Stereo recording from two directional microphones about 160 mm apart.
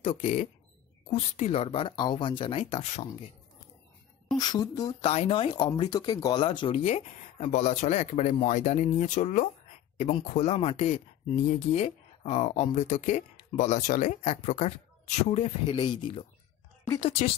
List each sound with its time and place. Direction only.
0.0 s speech: 40° left (ahead or behind)
4.4 s speech: 25° left (ahead or behind)
5.0 s speech: 40° left (ahead or behind)
15.6 s speech: 30° left (ahead or behind)